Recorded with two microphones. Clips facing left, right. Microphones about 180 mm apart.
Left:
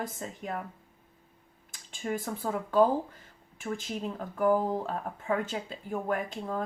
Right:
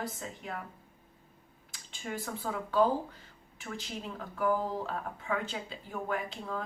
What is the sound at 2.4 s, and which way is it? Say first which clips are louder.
A woman's voice: left 3 dB; 45° left (ahead or behind).